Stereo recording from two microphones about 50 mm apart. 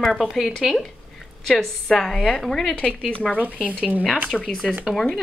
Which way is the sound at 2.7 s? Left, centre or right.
Left.